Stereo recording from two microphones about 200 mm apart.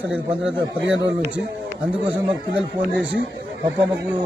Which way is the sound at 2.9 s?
60° right (ahead or behind).